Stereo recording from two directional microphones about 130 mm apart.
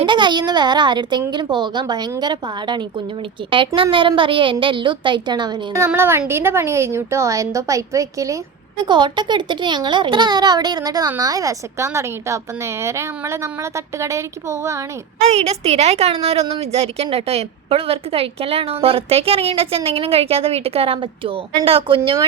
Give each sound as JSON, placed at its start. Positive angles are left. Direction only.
{"t": 0.0, "sound": "a child's voice", "side_deg": -35}
{"t": 3.9, "sound": "a child's voice", "side_deg": -40}
{"t": 5.9, "sound": "a woman's voice", "side_deg": -20}
{"t": 8.9, "sound": "a child's voice", "side_deg": -35}
{"t": 15.2, "sound": "a woman's voice", "side_deg": -55}